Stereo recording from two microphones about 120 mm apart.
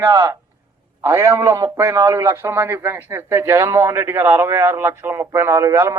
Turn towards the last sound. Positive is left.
turn(degrees=-20)  # may be behind; listen again after turning